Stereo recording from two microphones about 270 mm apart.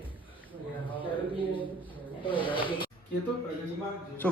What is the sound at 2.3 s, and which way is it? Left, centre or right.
Speech, centre.